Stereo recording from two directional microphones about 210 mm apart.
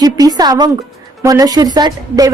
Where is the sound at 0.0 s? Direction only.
20° right (ahead or behind).